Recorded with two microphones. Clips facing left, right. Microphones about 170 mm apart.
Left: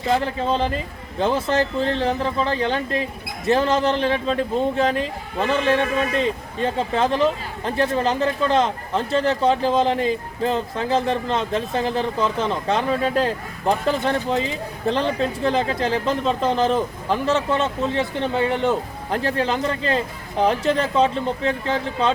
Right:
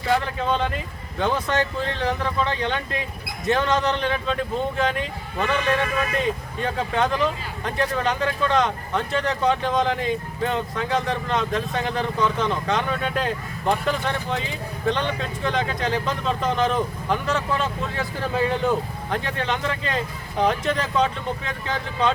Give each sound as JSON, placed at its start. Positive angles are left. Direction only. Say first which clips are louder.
{"t": 0.0, "sound": "speech", "louder": "left 2 dB", "side_deg": 30}